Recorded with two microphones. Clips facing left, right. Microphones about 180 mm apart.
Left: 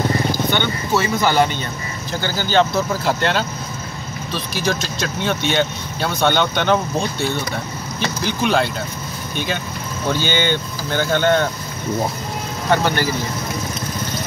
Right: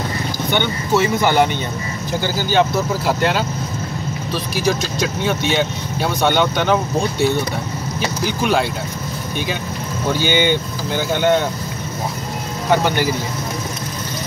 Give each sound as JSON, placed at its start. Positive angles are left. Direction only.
{"t": 0.5, "sound": "speech", "side_deg": -15}
{"t": 10.1, "sound": "speech", "side_deg": -10}
{"t": 12.8, "sound": "speech", "side_deg": -15}